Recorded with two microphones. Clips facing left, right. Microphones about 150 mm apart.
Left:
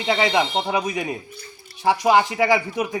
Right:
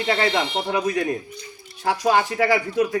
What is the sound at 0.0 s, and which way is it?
A man's voice, 15° left (ahead or behind).